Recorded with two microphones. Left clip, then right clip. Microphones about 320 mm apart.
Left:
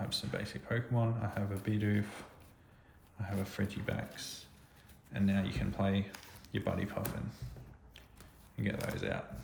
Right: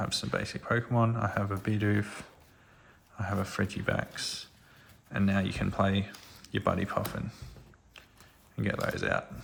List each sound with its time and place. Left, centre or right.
0.0 s speech: centre
8.5 s speech: centre